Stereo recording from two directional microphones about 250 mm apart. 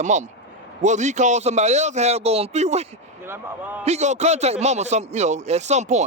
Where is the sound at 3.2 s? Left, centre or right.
Centre.